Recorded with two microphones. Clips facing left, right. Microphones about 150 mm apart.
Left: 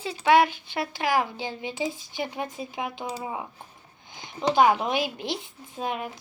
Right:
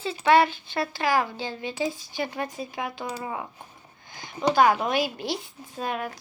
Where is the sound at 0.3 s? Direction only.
15° left (ahead or behind).